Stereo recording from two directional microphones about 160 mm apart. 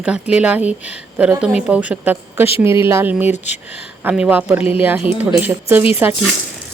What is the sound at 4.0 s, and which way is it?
Speech, 10° right (ahead or behind).